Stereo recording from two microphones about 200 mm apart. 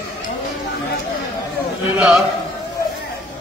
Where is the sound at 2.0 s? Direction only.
Centre (ahead or behind).